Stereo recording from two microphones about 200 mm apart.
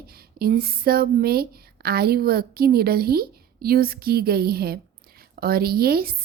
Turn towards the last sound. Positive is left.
turn(degrees=-50)  # may be behind; listen again after turning